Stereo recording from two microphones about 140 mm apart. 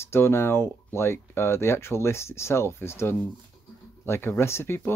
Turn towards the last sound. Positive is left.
turn(degrees=15)  # may be behind; listen again after turning